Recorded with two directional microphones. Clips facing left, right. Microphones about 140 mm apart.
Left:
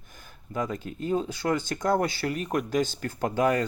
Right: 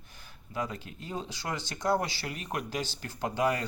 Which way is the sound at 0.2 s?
45° left (ahead or behind).